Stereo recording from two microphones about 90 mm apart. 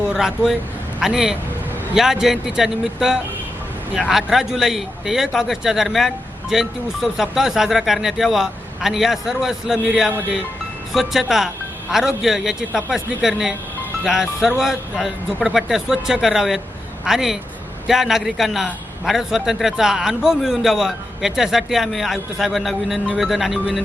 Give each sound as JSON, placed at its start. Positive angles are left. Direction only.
{"t": 0.1, "sound": "a man's voice", "side_deg": -5}